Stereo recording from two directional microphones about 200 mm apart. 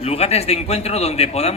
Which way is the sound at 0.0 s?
30° left (ahead or behind).